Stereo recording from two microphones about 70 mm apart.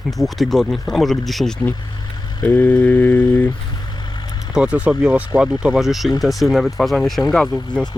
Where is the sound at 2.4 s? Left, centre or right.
Left.